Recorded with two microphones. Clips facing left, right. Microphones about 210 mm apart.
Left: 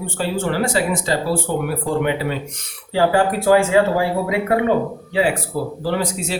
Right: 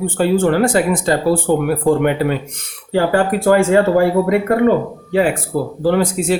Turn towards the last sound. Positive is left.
turn(degrees=-55)  # may be behind; listen again after turning